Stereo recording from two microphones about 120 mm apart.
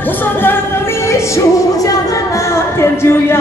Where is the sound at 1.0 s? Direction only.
25° left (ahead or behind).